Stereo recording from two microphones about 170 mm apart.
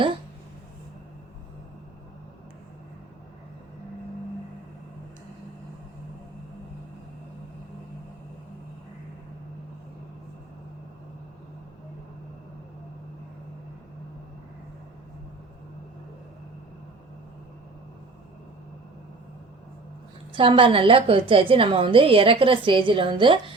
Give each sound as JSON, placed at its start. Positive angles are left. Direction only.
{"t": 20.3, "sound": "a woman's voice", "side_deg": -30}